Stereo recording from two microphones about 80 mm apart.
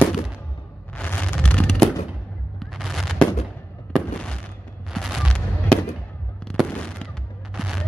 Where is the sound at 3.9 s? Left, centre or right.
Centre.